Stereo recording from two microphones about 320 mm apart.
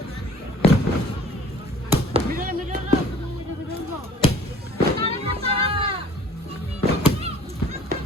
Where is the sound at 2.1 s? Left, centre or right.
Right.